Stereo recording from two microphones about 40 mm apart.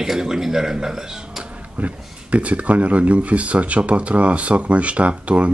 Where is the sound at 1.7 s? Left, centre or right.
Right.